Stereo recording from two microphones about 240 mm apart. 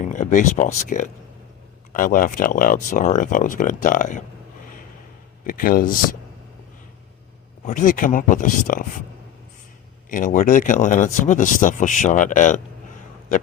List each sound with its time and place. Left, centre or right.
0.0 s speech: left
5.5 s speech: left
7.6 s speech: left
10.1 s speech: left